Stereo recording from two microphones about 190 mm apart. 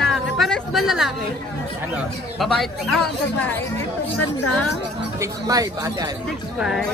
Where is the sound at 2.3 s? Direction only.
Centre (ahead or behind).